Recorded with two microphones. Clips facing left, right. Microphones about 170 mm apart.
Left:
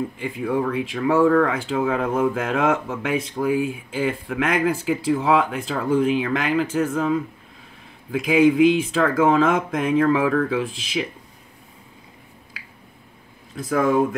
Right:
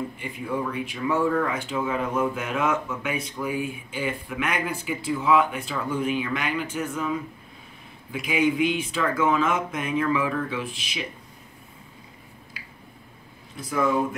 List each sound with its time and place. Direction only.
0.2 s speech: 90° left